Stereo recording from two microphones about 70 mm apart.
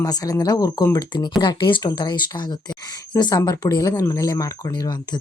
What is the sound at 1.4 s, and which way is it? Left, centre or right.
Speech, left.